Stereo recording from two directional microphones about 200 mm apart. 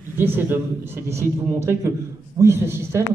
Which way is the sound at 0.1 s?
10° right (ahead or behind).